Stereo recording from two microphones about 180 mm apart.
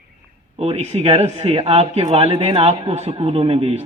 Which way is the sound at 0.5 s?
35° right (ahead or behind).